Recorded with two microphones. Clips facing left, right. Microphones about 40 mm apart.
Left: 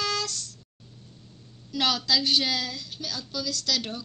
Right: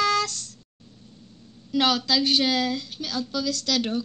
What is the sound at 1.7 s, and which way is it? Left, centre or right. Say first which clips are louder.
Speech: right 3 dB; right.